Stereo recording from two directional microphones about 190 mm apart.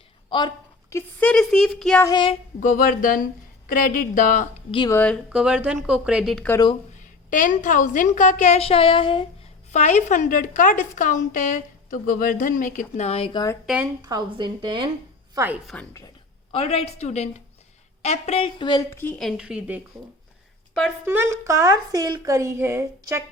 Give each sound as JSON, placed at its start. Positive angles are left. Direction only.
{"t": 0.3, "sound": "a woman's voice", "side_deg": 25}
{"t": 2.0, "sound": "a woman's voice", "side_deg": 25}
{"t": 2.6, "sound": "a woman's voice", "side_deg": 45}
{"t": 4.9, "sound": "speech", "side_deg": 10}
{"t": 5.3, "sound": "a woman's voice", "side_deg": -5}
{"t": 7.3, "sound": "a woman's voice", "side_deg": 45}
{"t": 9.7, "sound": "a woman's voice", "side_deg": 40}
{"t": 14.0, "sound": "a woman's voice", "side_deg": -20}
{"t": 15.4, "sound": "speech", "side_deg": -10}
{"t": 15.7, "sound": "speech", "side_deg": 5}
{"t": 16.5, "sound": "a woman's voice", "side_deg": 35}
{"t": 19.2, "sound": "a woman's voice", "side_deg": -5}
{"t": 21.0, "sound": "speech", "side_deg": -10}